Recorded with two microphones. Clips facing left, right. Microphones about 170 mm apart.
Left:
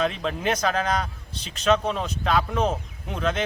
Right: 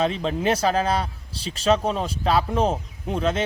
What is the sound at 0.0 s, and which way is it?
Speech, 30° right (ahead or behind).